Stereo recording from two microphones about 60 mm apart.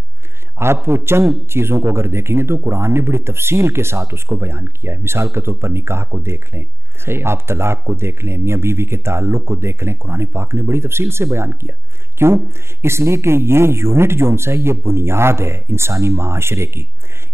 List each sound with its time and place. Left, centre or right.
0.8 s speech: right